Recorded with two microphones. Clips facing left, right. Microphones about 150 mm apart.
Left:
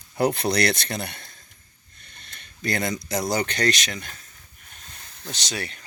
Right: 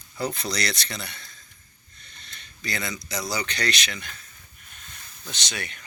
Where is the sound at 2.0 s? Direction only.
50° left (ahead or behind).